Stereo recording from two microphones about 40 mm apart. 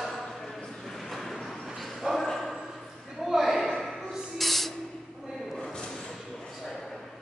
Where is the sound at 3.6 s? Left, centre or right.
Centre.